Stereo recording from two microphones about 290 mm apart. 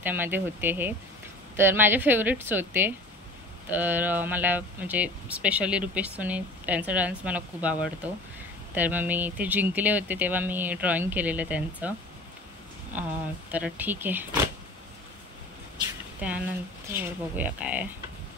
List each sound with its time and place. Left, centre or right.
0.0 s a woman's voice: centre
13.5 s a woman's voice: centre
16.2 s speech: centre